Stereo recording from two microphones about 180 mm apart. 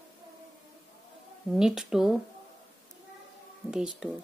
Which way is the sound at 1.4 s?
Centre (ahead or behind).